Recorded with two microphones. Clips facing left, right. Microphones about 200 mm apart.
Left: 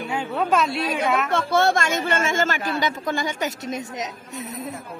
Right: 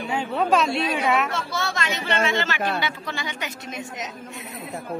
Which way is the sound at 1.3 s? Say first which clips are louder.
Left 8 dB; 55° left (ahead or behind).